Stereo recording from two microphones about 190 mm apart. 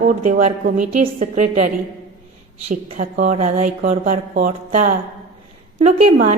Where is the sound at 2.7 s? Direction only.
45° right (ahead or behind).